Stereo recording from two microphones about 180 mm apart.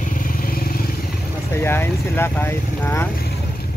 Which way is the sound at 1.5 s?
15° left (ahead or behind).